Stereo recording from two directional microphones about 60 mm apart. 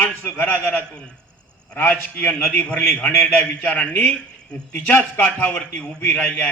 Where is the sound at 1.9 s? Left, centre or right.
Left.